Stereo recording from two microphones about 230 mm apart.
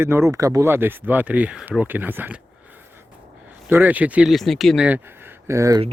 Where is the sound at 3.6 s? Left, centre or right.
Centre.